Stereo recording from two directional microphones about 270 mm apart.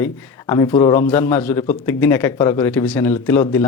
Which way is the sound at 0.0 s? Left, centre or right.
Centre.